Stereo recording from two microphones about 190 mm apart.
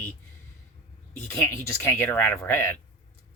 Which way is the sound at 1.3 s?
15° left (ahead or behind).